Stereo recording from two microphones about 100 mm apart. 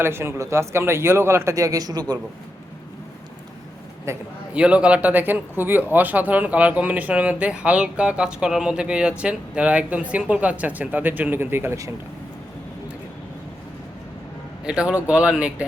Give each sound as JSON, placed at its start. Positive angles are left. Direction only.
{"t": 0.0, "sound": "a man's voice", "side_deg": -25}
{"t": 4.1, "sound": "a man's voice", "side_deg": -30}
{"t": 4.5, "sound": "speech", "side_deg": -10}
{"t": 14.6, "sound": "speech", "side_deg": -10}